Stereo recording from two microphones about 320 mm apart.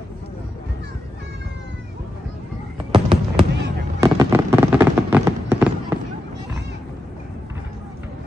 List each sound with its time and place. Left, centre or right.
2.9 s fireworks: centre